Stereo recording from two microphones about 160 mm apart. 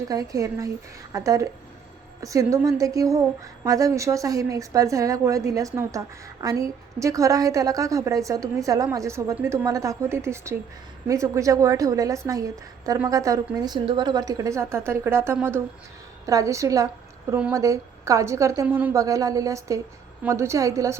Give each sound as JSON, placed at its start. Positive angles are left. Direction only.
{"t": 0.1, "sound": "a woman's voice", "side_deg": -20}